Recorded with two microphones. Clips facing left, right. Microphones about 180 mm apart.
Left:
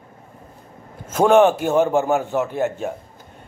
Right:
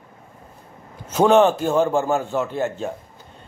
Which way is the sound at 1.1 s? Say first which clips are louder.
Left 1 dB; 10° left (ahead or behind).